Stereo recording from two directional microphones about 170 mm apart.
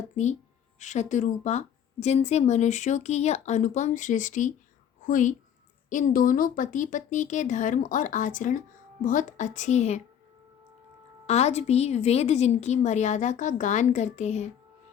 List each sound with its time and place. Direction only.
0.2 s speech: 45° left (ahead or behind)
11.3 s a woman's voice: 40° left (ahead or behind)